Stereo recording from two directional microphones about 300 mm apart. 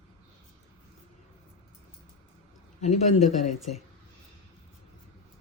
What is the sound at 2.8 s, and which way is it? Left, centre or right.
Speech, left.